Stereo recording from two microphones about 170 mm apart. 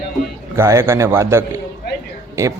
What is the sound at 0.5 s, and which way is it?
Speech, 15° right (ahead or behind).